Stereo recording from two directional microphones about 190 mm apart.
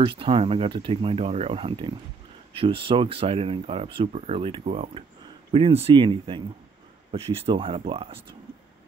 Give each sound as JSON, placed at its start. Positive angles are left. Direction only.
{"t": 0.0, "sound": "speech", "side_deg": -30}